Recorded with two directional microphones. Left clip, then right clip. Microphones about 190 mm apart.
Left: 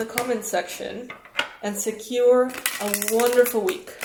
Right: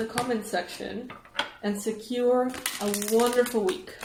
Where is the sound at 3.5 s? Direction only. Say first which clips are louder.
Left 3 dB; 30° left (ahead or behind).